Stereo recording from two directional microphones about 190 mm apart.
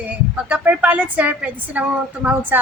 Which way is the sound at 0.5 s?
10° right (ahead or behind).